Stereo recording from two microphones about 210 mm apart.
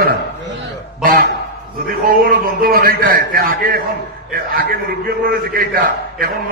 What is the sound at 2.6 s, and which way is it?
A man's voice, 45° right (ahead or behind).